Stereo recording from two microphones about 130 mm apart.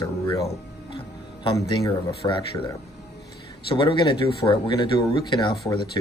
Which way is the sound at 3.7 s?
40° left (ahead or behind).